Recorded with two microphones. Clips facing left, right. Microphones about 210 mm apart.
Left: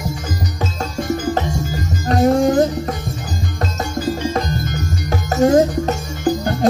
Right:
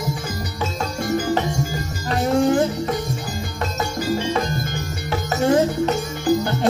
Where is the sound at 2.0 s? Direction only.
40° left (ahead or behind).